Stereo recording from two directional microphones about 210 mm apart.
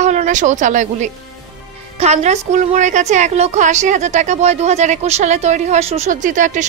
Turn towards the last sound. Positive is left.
turn(degrees=-35)  # may be behind; listen again after turning